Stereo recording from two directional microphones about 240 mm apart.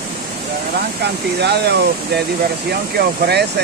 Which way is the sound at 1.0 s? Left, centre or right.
Right.